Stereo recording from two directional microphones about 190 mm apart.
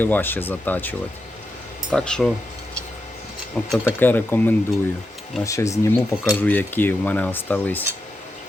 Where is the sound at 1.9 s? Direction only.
5° left (ahead or behind).